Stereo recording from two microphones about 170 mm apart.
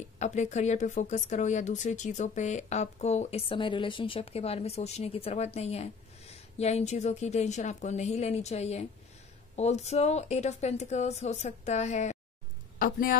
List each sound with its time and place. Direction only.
0.2 s speech: 45° left (ahead or behind)
12.7 s speech: 55° left (ahead or behind)